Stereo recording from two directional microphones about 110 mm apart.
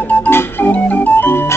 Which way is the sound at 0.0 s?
15° left (ahead or behind).